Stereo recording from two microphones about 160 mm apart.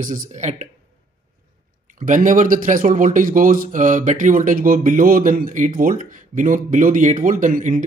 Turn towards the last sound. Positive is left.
turn(degrees=-55)  # may be behind; listen again after turning